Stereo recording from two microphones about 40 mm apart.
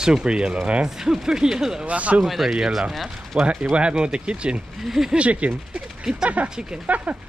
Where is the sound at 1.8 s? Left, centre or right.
Right.